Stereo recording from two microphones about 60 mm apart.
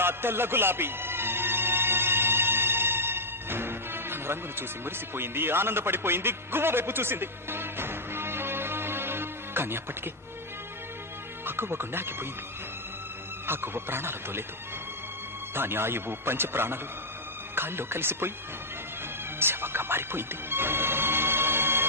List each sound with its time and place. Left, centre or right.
0.0 s music: right
11.4 s speech: right
13.5 s speech: right
15.5 s speech: right
19.4 s music: right